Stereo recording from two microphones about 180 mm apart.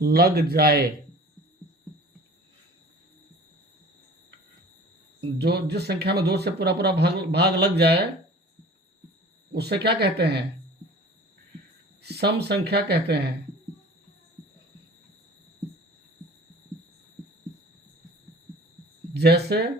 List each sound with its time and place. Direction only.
0.0 s speech: 60° right (ahead or behind)
5.4 s speech: 65° right (ahead or behind)
9.5 s speech: 65° right (ahead or behind)
12.0 s speech: 65° right (ahead or behind)
19.1 s speech: 65° right (ahead or behind)